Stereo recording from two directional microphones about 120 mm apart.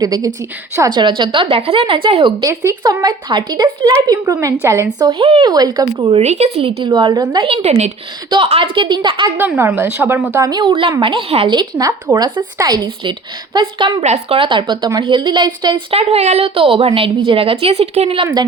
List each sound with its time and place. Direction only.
0.0 s a woman's voice: 30° right (ahead or behind)
2.4 s a woman's voice: 30° right (ahead or behind)
6.0 s a woman's voice: 45° right (ahead or behind)
6.2 s speech: 65° right (ahead or behind); by 6.9 s 50° right (ahead or behind)
6.9 s a woman's voice: 35° right (ahead or behind)
7.4 s speech: 60° right (ahead or behind)
8.4 s a woman's voice: 50° right (ahead or behind)
9.4 s a woman's voice: 15° right (ahead or behind); by 10.7 s 30° right (ahead or behind)
10.7 s a woman's voice: 45° right (ahead or behind)
14.0 s speech: 70° right (ahead or behind)
14.3 s a woman's voice: 45° right (ahead or behind)
15.9 s a woman's voice: 55° right (ahead or behind)